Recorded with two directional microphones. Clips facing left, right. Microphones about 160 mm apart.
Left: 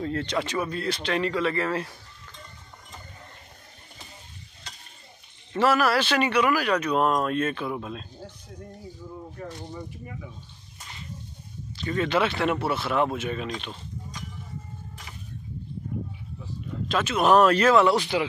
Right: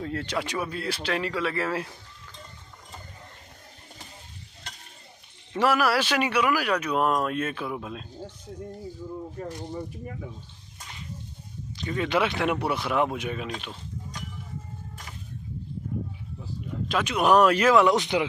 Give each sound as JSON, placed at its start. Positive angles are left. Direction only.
{"t": 0.0, "sound": "speech", "side_deg": -5}
{"t": 5.5, "sound": "speech", "side_deg": -10}
{"t": 9.5, "sound": "speech", "side_deg": -15}
{"t": 11.7, "sound": "speech", "side_deg": -15}
{"t": 16.8, "sound": "speech", "side_deg": -10}